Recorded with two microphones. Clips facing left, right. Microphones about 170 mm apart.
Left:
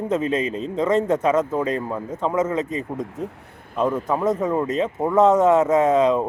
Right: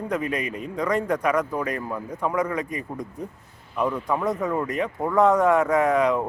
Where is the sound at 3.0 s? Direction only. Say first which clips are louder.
Left 5 dB; 90° left.